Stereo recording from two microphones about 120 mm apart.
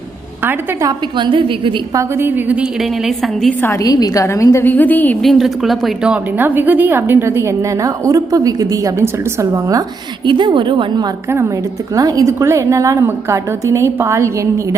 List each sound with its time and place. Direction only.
0.9 s a woman's voice: 40° right (ahead or behind)
1.9 s a woman's voice: 25° right (ahead or behind)
2.8 s a woman's voice: centre (ahead or behind)
3.6 s a woman's voice: 25° left (ahead or behind)
5.2 s a woman's voice: centre (ahead or behind); by 9.8 s 30° right (ahead or behind)
10.2 s a woman's voice: 45° right (ahead or behind)
11.3 s a woman's voice: 20° right (ahead or behind)